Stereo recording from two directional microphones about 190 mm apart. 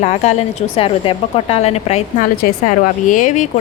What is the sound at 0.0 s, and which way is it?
A woman's voice, 35° left (ahead or behind).